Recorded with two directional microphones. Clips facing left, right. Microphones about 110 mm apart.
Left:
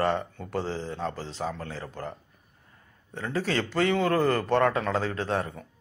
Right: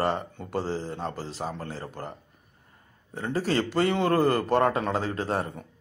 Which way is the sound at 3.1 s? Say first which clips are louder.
Right 2 dB; 10° right (ahead or behind).